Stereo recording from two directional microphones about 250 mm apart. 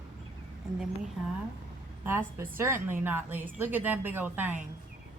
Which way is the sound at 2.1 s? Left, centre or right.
Centre.